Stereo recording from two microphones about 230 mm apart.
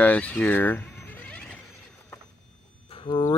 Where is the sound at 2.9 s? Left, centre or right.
Left.